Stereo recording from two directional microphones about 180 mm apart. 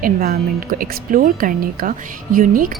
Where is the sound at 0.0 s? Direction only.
60° right (ahead or behind).